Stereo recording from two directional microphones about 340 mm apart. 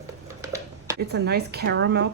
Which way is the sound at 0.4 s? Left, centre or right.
Centre.